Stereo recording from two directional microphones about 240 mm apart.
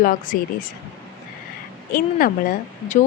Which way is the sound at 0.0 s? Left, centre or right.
Left.